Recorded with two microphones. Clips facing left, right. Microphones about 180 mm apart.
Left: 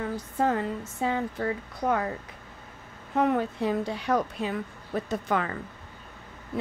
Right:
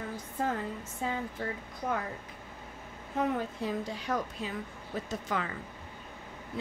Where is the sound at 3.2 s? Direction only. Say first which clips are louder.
Left 6 dB; 70° left (ahead or behind).